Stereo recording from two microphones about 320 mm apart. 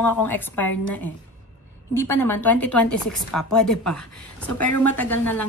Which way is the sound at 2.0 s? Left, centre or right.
Centre.